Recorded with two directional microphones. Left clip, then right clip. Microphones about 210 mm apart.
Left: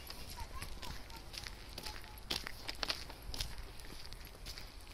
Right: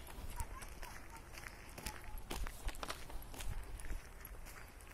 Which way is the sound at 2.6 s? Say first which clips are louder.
Left 7 dB; 20° right (ahead or behind).